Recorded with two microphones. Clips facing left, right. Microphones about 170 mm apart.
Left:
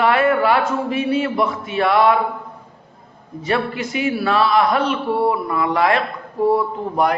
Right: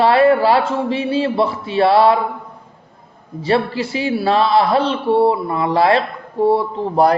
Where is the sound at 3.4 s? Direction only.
30° right (ahead or behind).